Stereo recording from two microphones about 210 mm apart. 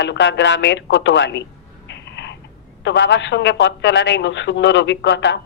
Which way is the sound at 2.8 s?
60° left (ahead or behind).